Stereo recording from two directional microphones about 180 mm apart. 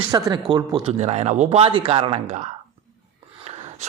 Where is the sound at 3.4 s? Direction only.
35° right (ahead or behind).